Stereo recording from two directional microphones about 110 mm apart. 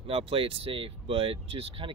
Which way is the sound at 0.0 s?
55° right (ahead or behind).